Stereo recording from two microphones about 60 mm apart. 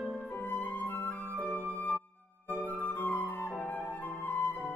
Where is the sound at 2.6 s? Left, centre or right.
Left.